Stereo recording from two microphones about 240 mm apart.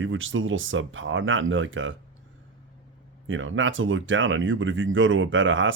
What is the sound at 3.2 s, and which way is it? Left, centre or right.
Speech, right.